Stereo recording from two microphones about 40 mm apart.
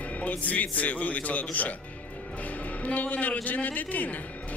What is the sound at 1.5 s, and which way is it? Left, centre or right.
Speech, left.